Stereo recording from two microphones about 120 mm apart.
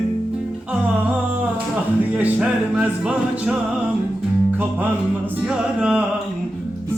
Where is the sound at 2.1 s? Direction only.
10° right (ahead or behind).